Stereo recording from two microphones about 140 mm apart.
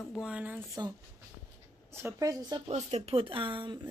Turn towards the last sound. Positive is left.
turn(degrees=-35)  # may be behind; listen again after turning